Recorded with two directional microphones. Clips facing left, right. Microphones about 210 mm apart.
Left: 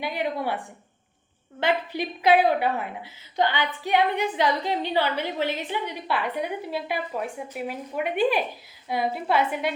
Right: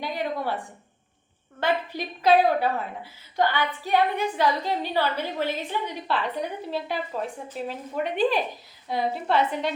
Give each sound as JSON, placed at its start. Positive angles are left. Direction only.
{"t": 0.0, "sound": "a woman's voice", "side_deg": 10}
{"t": 2.0, "sound": "a woman's voice", "side_deg": 15}